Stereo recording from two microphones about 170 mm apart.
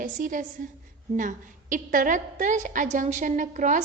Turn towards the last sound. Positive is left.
turn(degrees=-50)  # may be behind; listen again after turning